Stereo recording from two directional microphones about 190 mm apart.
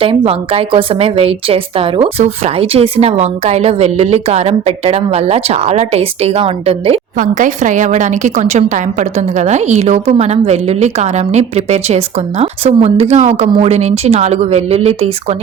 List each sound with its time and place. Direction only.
0.0 s a woman's voice: 30° right (ahead or behind)
7.2 s a woman's voice: 40° right (ahead or behind)